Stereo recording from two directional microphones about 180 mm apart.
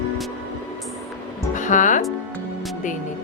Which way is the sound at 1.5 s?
45° left (ahead or behind).